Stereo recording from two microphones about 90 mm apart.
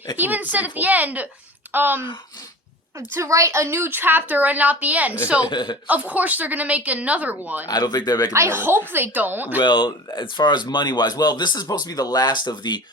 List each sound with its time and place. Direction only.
0.2 s a woman's voice: 20° right (ahead or behind)
3.2 s a woman's voice: 35° right (ahead or behind); by 5.1 s 15° right (ahead or behind)
5.5 s speech: 60° left (ahead or behind)
5.9 s a woman's voice: 15° right (ahead or behind)
7.7 s speech: 50° left (ahead or behind)
8.3 s a woman's voice: 25° right (ahead or behind)
9.6 s speech: 60° left (ahead or behind)